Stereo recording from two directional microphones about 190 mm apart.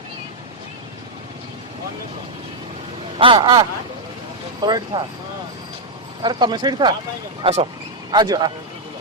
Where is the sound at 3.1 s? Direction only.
25° right (ahead or behind).